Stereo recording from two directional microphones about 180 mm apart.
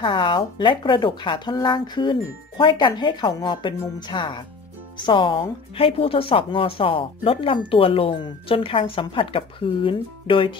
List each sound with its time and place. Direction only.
0.0 s speech: 25° left (ahead or behind)